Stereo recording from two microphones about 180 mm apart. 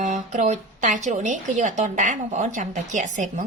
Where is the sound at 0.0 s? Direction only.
45° right (ahead or behind).